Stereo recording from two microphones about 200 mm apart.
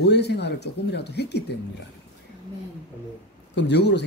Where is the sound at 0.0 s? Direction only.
55° left (ahead or behind).